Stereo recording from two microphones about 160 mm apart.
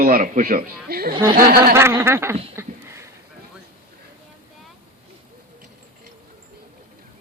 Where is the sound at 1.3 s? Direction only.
70° right (ahead or behind).